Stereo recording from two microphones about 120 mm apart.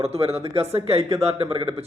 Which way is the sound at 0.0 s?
60° right (ahead or behind).